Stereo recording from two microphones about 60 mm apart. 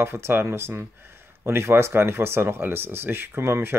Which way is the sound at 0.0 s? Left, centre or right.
Right.